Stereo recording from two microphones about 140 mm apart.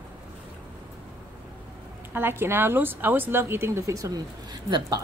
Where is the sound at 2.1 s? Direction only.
15° right (ahead or behind).